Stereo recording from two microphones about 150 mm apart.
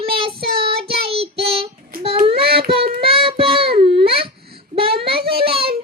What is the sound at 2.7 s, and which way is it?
Child singing, 90° right.